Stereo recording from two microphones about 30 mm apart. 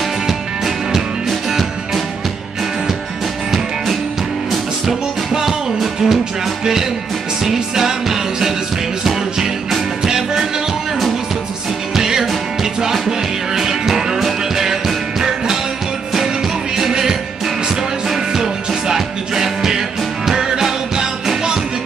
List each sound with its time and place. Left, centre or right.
4.8 s music: centre
11.9 s music: centre
13.6 s music: centre
16.9 s music: centre